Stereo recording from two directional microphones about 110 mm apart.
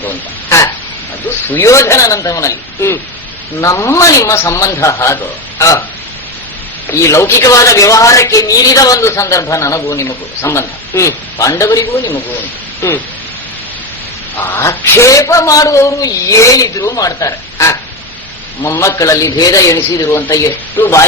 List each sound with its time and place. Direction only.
1.5 s speech: 20° left (ahead or behind)
7.0 s speech: 25° left (ahead or behind)
14.3 s speech: 25° left (ahead or behind)